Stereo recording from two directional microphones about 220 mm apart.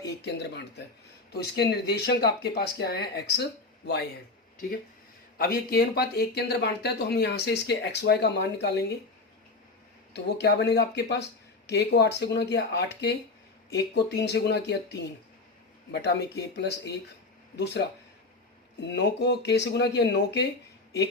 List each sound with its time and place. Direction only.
0.2 s speech: 50° left (ahead or behind)
5.4 s speech: 45° left (ahead or behind)
10.1 s speech: 50° left (ahead or behind)
18.8 s speech: 50° left (ahead or behind)